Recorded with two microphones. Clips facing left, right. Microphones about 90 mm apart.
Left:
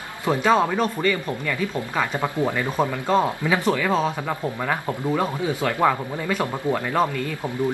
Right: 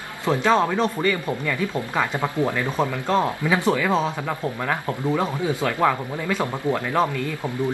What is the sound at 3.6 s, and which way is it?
A man's voice, 5° right (ahead or behind).